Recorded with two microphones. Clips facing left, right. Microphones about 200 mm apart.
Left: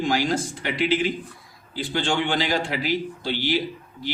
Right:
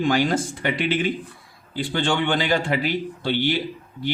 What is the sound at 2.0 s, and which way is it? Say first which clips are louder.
Speech: right 2 dB; 55° right (ahead or behind).